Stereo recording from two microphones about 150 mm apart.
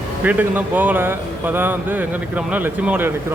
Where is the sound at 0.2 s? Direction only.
10° right (ahead or behind).